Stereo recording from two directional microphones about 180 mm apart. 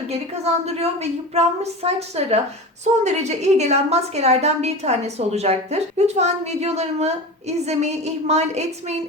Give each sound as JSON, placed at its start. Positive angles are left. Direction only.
{"t": 0.6, "sound": "a woman's voice", "side_deg": -35}